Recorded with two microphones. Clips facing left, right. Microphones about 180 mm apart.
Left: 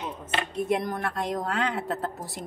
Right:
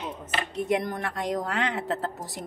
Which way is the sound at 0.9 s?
20° right (ahead or behind).